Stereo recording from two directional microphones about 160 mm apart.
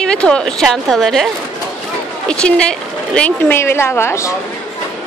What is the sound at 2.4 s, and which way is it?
A woman's voice, 5° left (ahead or behind).